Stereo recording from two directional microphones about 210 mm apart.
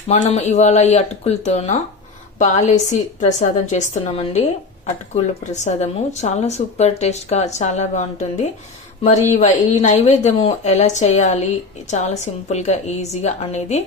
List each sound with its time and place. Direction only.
0.1 s speech: 30° left (ahead or behind)